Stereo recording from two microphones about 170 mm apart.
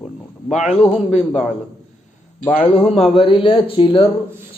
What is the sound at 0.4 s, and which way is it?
Speech, 45° left (ahead or behind).